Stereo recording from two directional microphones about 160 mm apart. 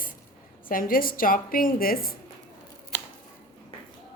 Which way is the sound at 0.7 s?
60° left (ahead or behind).